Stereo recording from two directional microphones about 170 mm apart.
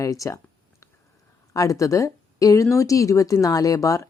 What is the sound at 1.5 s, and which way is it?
Speech, 20° left (ahead or behind).